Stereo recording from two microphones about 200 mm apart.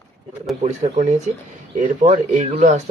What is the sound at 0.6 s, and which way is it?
Speech, 35° right (ahead or behind).